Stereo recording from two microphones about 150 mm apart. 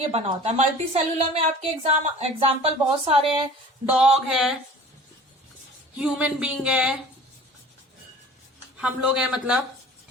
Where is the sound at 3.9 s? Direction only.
5° right (ahead or behind).